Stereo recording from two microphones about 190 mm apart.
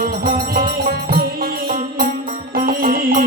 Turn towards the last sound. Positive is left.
turn(degrees=-50)  # may be behind; listen again after turning